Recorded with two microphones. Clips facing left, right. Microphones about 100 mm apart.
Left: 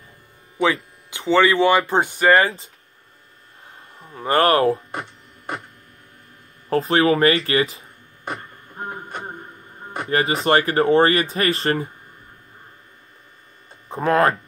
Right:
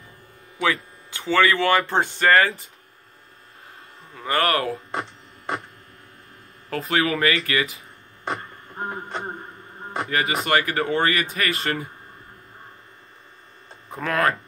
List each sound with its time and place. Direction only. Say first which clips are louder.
0.6 s speech: left 3 dB; 20° left (ahead or behind)
2.4 s speech: left 1 dB; 25° left (ahead or behind)
4.1 s speech: left 5 dB; 30° left (ahead or behind)
6.7 s speech: left 6 dB; 30° left (ahead or behind)
10.0 s speech: left 5 dB; 30° left (ahead or behind)
13.8 s speech: left 5 dB; 30° left (ahead or behind)